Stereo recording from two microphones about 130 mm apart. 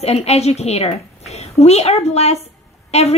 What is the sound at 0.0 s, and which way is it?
A woman's voice, 55° left (ahead or behind).